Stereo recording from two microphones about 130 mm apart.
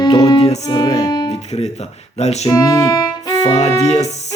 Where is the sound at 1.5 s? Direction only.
55° left (ahead or behind).